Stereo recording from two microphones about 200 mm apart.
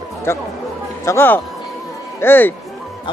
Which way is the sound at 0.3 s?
10° left (ahead or behind).